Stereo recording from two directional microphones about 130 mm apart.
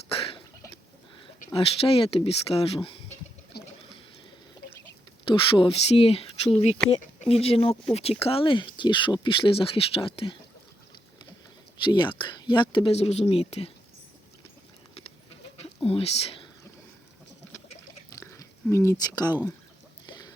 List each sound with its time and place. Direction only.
1.5 s speech: 45° left (ahead or behind)
5.3 s speech: 40° left (ahead or behind)
11.9 s speech: 35° left (ahead or behind)
15.8 s speech: 45° left (ahead or behind)
18.1 s chewing: 25° left (ahead or behind)
20.1 s a sound: 30° left (ahead or behind)